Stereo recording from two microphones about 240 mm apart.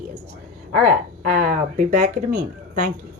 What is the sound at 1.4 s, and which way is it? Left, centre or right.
Speech, right.